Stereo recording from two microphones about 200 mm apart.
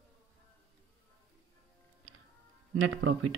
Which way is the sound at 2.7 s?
90° right.